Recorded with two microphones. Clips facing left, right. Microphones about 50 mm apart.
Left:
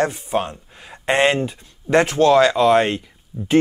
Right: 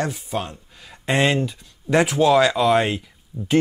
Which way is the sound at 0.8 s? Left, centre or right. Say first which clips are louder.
Left 3 dB; left.